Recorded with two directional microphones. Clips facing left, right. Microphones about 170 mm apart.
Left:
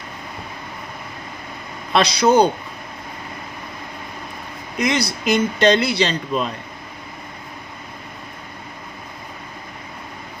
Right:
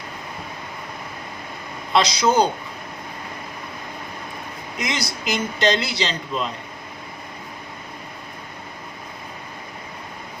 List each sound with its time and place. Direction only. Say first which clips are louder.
1.9 s speech: left 3 dB; 60° left (ahead or behind)
4.8 s speech: left 7 dB; 60° left (ahead or behind)